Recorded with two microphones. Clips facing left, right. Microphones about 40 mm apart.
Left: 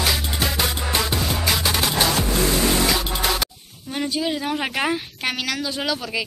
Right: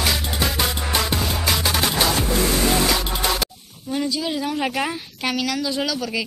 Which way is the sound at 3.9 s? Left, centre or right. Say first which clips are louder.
Right 1 dB; left.